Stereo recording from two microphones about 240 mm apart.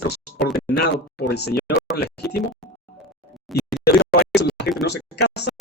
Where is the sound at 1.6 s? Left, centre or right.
Centre.